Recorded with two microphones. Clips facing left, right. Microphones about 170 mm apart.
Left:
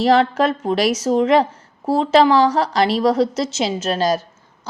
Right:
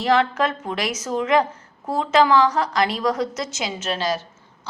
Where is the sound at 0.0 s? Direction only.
35° left (ahead or behind).